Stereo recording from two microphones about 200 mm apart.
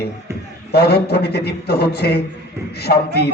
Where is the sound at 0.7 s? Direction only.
50° left (ahead or behind).